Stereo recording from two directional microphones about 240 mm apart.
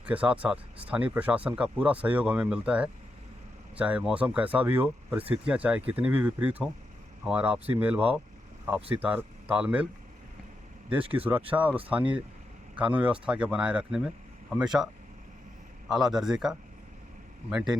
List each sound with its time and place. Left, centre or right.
0.0 s speech: centre
10.9 s speech: right
11.5 s speech: centre
15.9 s speech: centre